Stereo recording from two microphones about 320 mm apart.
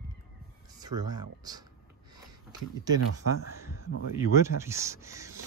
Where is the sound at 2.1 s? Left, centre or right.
Centre.